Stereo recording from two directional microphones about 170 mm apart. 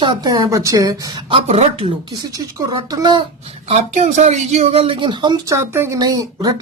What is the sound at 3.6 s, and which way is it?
Speech, 40° right (ahead or behind).